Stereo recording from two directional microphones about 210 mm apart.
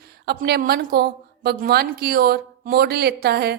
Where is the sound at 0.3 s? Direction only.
50° right (ahead or behind).